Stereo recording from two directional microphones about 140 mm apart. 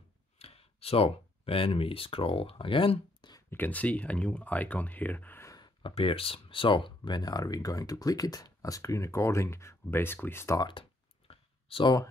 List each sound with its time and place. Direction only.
0.4 s speech: 45° left (ahead or behind)
3.4 s speech: 15° left (ahead or behind)
5.5 s speech: 35° left (ahead or behind); by 10.6 s 15° left (ahead or behind)
10.6 s clicking: 40° left (ahead or behind)